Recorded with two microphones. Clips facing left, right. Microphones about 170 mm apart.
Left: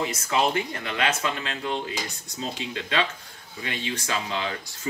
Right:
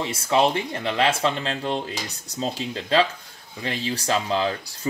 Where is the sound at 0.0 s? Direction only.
30° right (ahead or behind).